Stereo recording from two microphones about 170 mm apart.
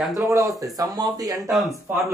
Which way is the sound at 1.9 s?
10° right (ahead or behind).